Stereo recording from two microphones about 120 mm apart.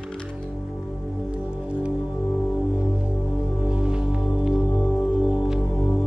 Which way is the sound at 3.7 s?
10° right (ahead or behind).